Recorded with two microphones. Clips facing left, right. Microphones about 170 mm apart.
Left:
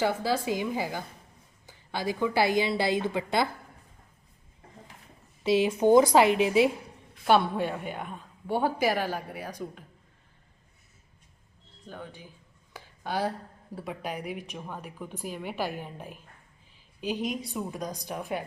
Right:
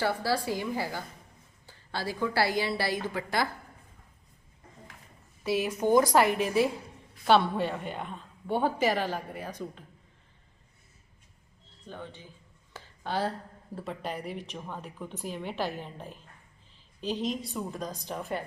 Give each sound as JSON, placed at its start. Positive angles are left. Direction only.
{"t": 0.0, "sound": "a woman's voice", "side_deg": 20}
{"t": 5.4, "sound": "a woman's voice", "side_deg": 25}
{"t": 11.9, "sound": "a woman's voice", "side_deg": 5}
{"t": 12.7, "sound": "a sound", "side_deg": 10}
{"t": 13.7, "sound": "a woman's voice", "side_deg": 10}